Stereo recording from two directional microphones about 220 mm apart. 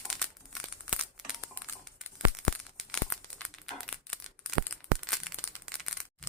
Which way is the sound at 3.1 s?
5° left (ahead or behind).